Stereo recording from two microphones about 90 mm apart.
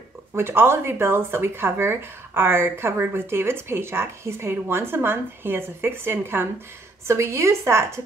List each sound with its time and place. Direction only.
0.4 s a woman's voice: 25° right (ahead or behind)